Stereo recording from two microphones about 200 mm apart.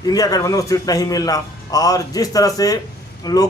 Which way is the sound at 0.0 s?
20° left (ahead or behind).